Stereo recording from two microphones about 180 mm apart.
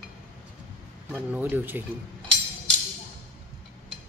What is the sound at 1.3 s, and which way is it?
Speech, 10° right (ahead or behind).